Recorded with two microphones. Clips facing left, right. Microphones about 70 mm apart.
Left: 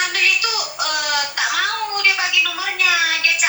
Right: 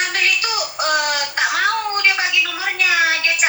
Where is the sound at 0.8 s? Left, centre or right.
Right.